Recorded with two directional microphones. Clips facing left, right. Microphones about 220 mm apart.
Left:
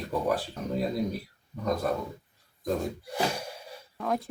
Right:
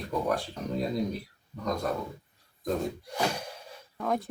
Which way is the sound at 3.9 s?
Centre (ahead or behind).